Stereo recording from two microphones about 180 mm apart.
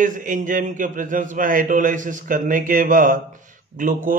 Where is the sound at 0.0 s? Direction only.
45° right (ahead or behind).